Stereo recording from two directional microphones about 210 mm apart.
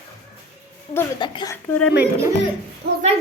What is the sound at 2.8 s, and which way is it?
Speech, 50° right (ahead or behind).